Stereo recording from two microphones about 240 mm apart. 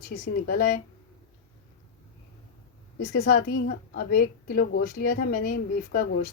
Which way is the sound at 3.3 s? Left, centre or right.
Left.